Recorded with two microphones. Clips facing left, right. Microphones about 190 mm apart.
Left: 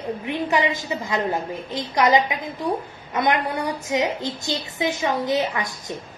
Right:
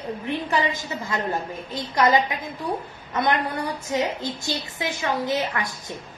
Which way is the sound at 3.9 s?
15° left (ahead or behind).